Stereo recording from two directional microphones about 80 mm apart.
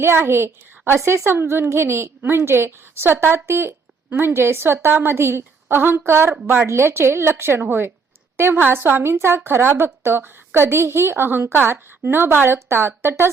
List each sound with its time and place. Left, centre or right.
0.0 s a woman's voice: right